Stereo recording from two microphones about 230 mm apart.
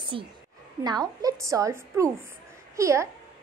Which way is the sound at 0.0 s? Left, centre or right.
Right.